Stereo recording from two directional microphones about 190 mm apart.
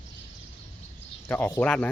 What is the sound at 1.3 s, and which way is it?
Speech, 15° left (ahead or behind).